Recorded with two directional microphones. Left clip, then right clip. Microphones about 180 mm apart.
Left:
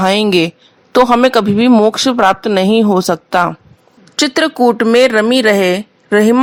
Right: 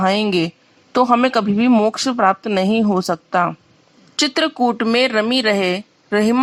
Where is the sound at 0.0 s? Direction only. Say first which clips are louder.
Left 6 dB; 35° left (ahead or behind).